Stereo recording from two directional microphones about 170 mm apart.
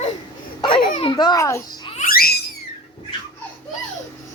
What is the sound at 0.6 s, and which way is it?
Babbling, 30° left (ahead or behind).